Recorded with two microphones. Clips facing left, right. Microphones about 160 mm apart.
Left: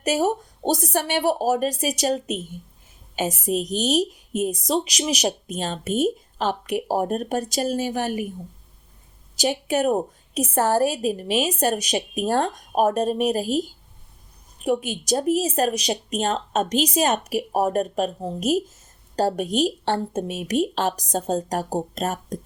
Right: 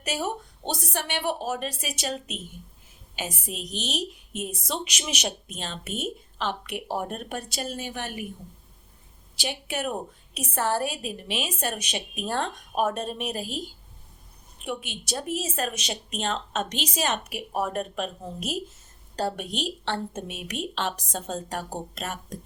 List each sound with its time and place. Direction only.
0.0 s a woman's voice: 40° left (ahead or behind)
9.3 s a woman's voice: 40° left (ahead or behind)